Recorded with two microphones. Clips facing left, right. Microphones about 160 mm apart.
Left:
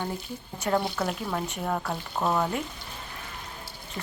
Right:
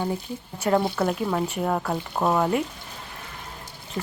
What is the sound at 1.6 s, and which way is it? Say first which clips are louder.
Speech: right 5 dB; 25° right (ahead or behind).